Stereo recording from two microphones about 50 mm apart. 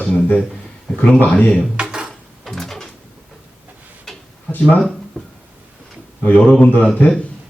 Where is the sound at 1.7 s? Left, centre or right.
Centre.